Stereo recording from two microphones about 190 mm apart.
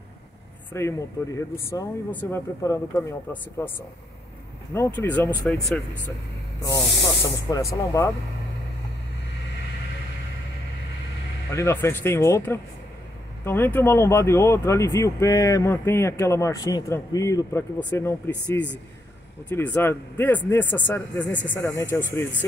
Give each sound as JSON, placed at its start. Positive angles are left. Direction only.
{"t": 0.7, "sound": "speech", "side_deg": 15}
{"t": 4.7, "sound": "speech", "side_deg": 10}
{"t": 6.6, "sound": "speech", "side_deg": 20}
{"t": 11.5, "sound": "speech", "side_deg": 15}